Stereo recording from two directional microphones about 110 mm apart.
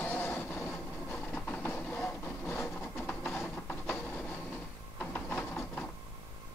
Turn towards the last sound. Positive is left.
turn(degrees=10)  # may be behind; listen again after turning